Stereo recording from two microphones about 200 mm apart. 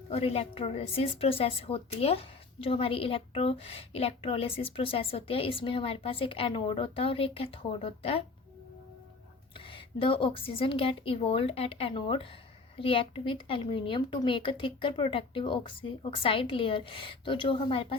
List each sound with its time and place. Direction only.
0.1 s a woman's voice: 30° left (ahead or behind)
9.6 s a woman's voice: 25° left (ahead or behind)